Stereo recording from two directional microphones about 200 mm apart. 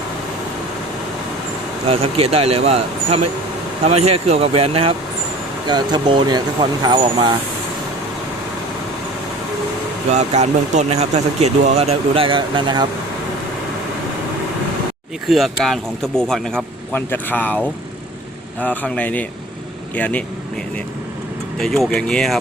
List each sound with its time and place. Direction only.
1.9 s speech: 30° right (ahead or behind)
10.1 s speech: 35° right (ahead or behind)
15.3 s speech: centre (ahead or behind)
21.6 s speech: centre (ahead or behind)